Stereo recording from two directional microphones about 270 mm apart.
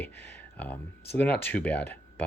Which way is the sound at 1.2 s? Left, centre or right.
Centre.